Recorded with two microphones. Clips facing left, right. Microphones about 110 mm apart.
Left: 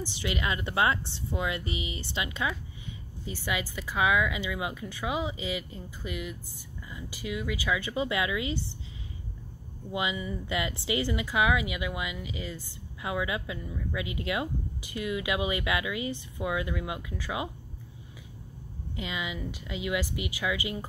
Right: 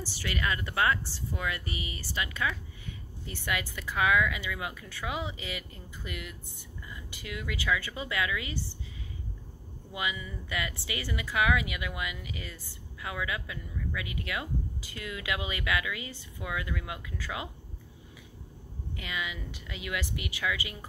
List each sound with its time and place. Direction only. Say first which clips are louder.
0.0 s speech: left 2 dB; 20° left (ahead or behind)
3.3 s speech: left 1 dB; 10° left (ahead or behind)
9.9 s speech: left 4 dB; 20° left (ahead or behind)
18.9 s speech: left 3 dB; 15° left (ahead or behind)